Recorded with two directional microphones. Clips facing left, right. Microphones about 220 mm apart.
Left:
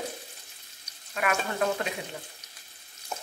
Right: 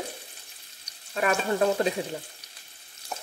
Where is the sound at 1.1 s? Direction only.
35° right (ahead or behind).